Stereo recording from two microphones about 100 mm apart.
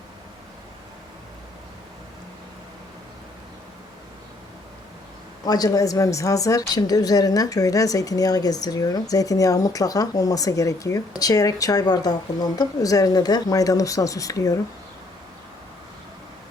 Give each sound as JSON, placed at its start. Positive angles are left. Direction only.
{"t": 5.5, "sound": "a woman's voice", "side_deg": 40}